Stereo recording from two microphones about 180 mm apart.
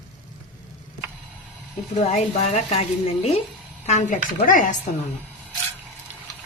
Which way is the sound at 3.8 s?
45° left (ahead or behind).